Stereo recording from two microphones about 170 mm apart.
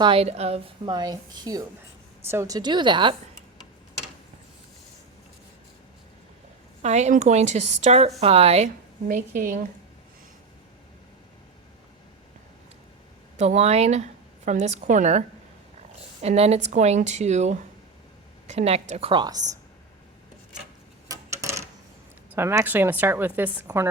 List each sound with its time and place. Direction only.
0.0 s a woman's voice: 35° right (ahead or behind)
6.8 s a woman's voice: 40° right (ahead or behind)
9.0 s a woman's voice: 55° right (ahead or behind)
13.4 s a woman's voice: 40° right (ahead or behind)
16.2 s a woman's voice: 40° right (ahead or behind)
21.1 s tick-tock: 15° right (ahead or behind)
22.4 s a woman's voice: 15° right (ahead or behind)